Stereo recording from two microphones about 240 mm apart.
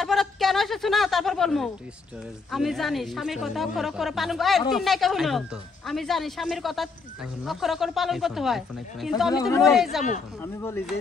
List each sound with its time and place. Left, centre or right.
0.0 s a sound: centre
2.5 s speech: centre
9.3 s speech: centre
9.6 s speech: centre
10.4 s speech: centre